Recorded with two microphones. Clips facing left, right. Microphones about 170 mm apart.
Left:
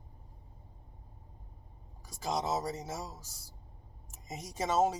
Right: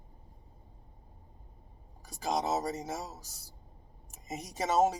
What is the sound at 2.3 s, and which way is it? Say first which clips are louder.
Speech: right 2 dB; 15° right (ahead or behind).